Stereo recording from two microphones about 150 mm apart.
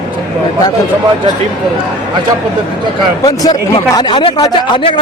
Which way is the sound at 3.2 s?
25° left (ahead or behind).